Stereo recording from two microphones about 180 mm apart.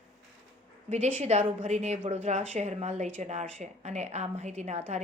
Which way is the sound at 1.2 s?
40° right (ahead or behind).